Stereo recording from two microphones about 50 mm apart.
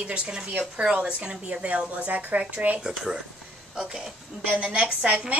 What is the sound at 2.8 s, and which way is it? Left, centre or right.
Speech, centre.